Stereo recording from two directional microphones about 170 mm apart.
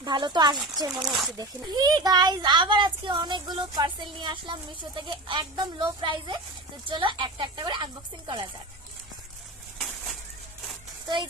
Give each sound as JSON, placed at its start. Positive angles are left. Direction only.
{"t": 0.0, "sound": "a child's voice", "side_deg": -25}
{"t": 0.9, "sound": "speech", "side_deg": 0}
{"t": 1.4, "sound": "a child's voice", "side_deg": -25}
{"t": 9.7, "sound": "a sound", "side_deg": 5}